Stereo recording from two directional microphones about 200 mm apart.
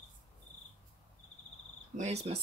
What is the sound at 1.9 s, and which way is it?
Cricket, 35° right (ahead or behind).